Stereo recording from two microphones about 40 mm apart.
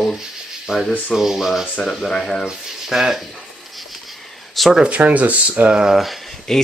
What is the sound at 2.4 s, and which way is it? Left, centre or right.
Speech, centre.